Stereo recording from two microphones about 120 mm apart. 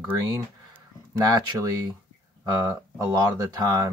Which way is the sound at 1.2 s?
35° right (ahead or behind).